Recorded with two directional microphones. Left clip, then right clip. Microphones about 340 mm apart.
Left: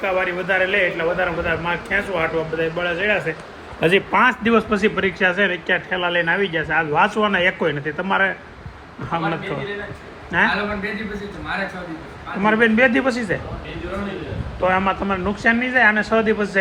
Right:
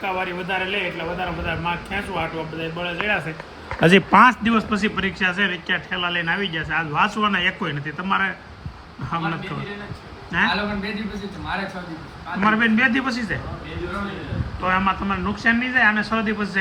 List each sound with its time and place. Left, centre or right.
0.0 s a man's voice: centre
3.8 s a man's voice: right
4.2 s a man's voice: centre
10.3 s a man's voice: centre
12.5 s a man's voice: centre
14.6 s a man's voice: centre